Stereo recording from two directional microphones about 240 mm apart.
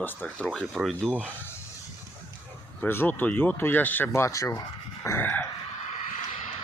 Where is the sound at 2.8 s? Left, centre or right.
Centre.